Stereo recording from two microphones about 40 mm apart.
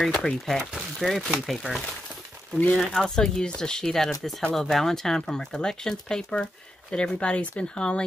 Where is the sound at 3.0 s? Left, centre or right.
Centre.